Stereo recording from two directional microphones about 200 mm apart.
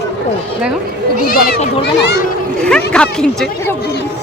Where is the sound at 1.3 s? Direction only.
45° left (ahead or behind).